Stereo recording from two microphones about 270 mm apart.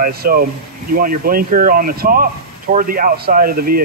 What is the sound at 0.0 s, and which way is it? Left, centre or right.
Speech, right.